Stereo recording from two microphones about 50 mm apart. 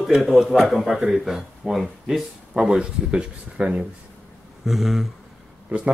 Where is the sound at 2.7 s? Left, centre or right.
Centre.